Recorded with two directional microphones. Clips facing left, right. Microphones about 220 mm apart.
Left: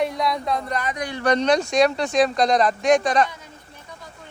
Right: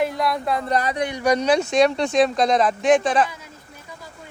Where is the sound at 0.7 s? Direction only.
35° right (ahead or behind).